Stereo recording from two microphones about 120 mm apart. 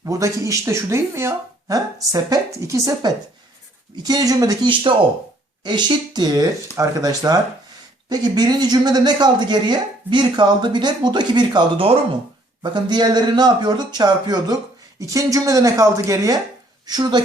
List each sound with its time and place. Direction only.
0.0 s speech: 30° right (ahead or behind)
4.7 s a woman's voice: 45° right (ahead or behind)